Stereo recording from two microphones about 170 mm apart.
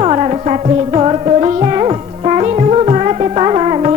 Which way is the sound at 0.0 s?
35° right (ahead or behind).